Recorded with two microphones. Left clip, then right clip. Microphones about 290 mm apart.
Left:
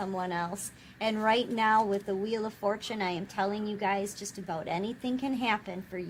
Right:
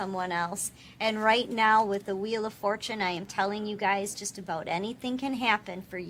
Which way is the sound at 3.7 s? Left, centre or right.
Left.